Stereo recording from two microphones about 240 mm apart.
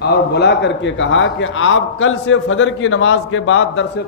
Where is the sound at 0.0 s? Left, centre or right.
Left.